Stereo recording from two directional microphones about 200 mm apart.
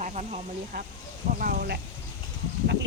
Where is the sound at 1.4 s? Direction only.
50° right (ahead or behind).